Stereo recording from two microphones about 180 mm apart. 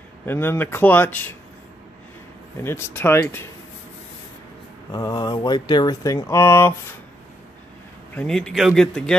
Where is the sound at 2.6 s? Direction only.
10° left (ahead or behind).